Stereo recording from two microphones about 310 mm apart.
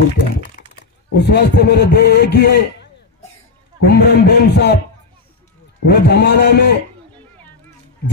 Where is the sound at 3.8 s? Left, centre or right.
Left.